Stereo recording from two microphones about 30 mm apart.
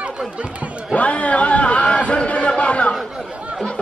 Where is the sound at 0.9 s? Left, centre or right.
Left.